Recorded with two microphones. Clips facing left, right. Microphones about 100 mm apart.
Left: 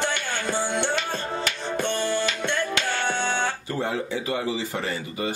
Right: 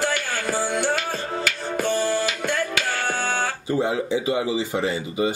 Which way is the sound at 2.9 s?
40° right (ahead or behind).